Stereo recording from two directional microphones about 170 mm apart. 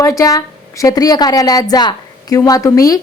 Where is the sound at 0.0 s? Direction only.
20° left (ahead or behind).